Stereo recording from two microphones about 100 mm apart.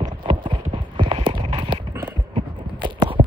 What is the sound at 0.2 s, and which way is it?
Clip-clop, 55° right (ahead or behind).